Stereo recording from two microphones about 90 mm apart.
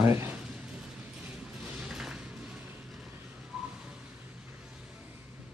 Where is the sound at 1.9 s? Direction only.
5° right (ahead or behind).